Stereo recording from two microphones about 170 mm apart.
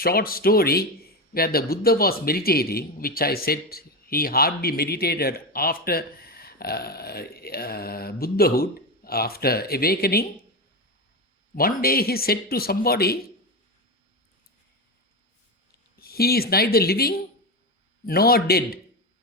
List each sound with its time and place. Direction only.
0.0 s a man's voice: 60° left (ahead or behind)
11.5 s a man's voice: 60° left (ahead or behind)
16.0 s a man's voice: 65° left (ahead or behind)